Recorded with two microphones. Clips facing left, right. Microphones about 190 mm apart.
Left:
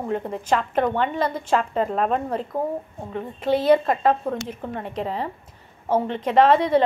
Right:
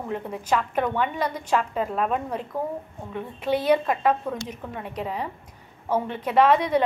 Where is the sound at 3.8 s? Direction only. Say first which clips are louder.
Left 2 dB; 45° left (ahead or behind).